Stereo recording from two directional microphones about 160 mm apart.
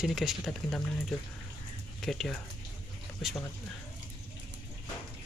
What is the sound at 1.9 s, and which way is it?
Speech, centre (ahead or behind).